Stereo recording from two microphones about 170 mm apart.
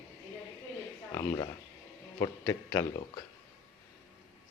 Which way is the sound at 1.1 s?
25° left (ahead or behind).